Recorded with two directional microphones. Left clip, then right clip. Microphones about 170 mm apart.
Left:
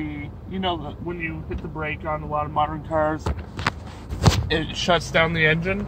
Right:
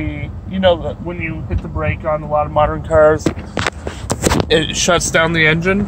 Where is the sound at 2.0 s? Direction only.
60° right (ahead or behind).